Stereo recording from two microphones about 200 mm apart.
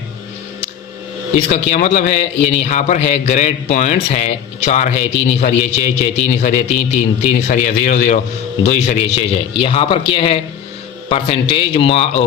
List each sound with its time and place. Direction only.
1.5 s a man's voice: 35° left (ahead or behind)